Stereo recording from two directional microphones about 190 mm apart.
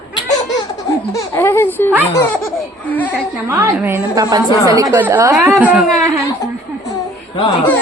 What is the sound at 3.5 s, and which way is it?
A woman's voice, 15° right (ahead or behind).